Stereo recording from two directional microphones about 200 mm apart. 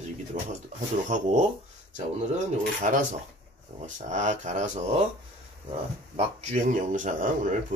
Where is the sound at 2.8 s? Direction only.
40° right (ahead or behind).